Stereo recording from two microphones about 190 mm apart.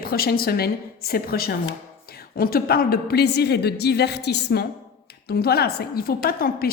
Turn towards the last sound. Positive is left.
turn(degrees=50)  # may be behind; listen again after turning